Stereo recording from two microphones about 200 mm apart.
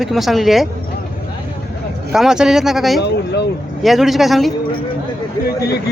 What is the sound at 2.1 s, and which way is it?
Speech, centre (ahead or behind).